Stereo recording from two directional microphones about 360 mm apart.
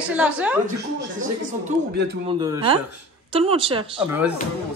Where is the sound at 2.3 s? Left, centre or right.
Centre.